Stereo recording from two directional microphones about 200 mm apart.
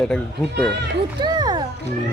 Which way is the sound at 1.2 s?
20° right (ahead or behind).